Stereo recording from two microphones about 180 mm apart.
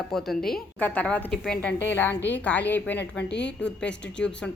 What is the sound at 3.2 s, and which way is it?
Speech, 75° left (ahead or behind).